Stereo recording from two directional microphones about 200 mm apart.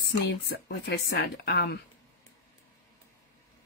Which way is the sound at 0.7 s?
55° left (ahead or behind).